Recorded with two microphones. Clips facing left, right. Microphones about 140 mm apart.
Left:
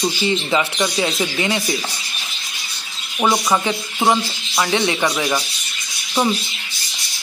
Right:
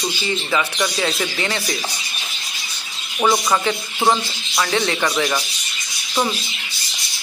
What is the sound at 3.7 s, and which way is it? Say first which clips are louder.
Speech: even; 15° left (ahead or behind).